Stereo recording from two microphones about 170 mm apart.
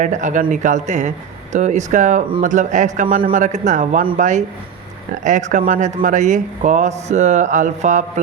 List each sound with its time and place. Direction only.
0.0 s speech: 45° right (ahead or behind)